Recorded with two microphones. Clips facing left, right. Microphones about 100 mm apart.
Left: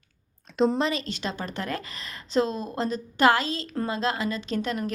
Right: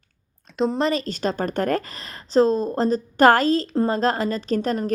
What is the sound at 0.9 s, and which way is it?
A woman's voice, 40° right (ahead or behind).